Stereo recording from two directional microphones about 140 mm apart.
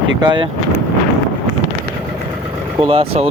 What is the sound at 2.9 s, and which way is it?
Speech, 45° right (ahead or behind).